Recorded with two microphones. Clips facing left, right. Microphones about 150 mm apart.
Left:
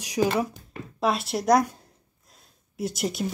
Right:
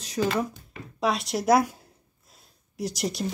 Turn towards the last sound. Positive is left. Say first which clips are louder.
# left 1 dB
turn(degrees=0)  # may be behind; listen again after turning